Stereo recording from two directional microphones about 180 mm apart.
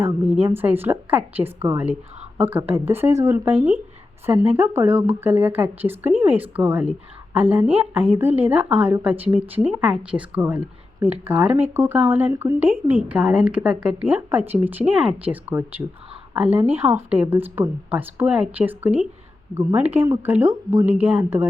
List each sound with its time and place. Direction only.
0.0 s speech: 10° right (ahead or behind)